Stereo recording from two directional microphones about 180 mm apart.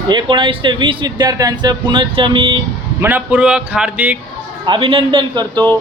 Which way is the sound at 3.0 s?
10° right (ahead or behind).